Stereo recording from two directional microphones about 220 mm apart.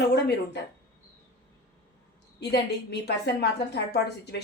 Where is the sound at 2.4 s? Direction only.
50° left (ahead or behind).